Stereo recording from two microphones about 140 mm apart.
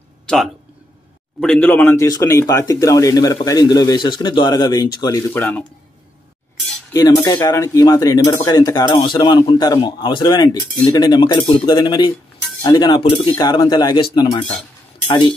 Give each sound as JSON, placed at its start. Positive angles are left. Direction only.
{"t": 1.4, "sound": "speech", "side_deg": 5}
{"t": 5.3, "sound": "speech", "side_deg": 10}
{"t": 6.9, "sound": "speech", "side_deg": 25}